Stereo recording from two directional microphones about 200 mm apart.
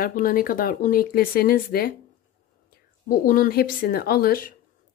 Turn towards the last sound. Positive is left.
turn(degrees=50)  # may be behind; listen again after turning